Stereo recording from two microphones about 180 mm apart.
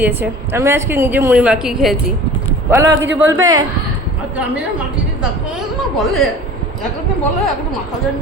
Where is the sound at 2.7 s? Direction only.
15° right (ahead or behind).